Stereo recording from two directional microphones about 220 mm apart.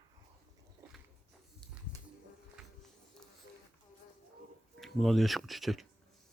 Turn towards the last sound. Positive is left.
turn(degrees=0)  # may be behind; listen again after turning